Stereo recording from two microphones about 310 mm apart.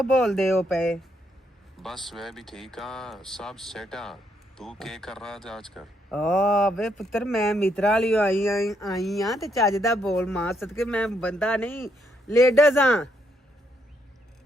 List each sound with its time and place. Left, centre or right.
0.0 s speech: centre